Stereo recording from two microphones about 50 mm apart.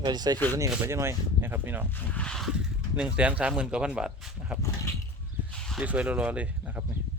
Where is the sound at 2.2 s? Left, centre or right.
Centre.